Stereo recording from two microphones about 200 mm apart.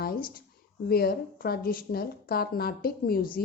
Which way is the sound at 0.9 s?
50° left (ahead or behind).